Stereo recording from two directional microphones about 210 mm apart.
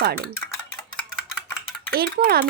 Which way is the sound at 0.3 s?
5° left (ahead or behind).